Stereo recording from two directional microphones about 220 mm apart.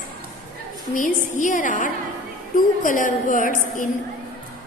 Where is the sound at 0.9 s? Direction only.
35° left (ahead or behind).